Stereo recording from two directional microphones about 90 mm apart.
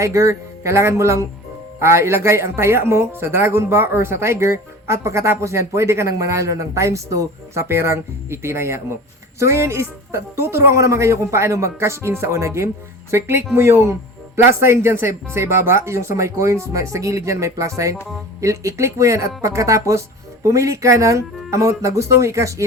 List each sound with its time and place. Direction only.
0.0 s speech: 35° right (ahead or behind)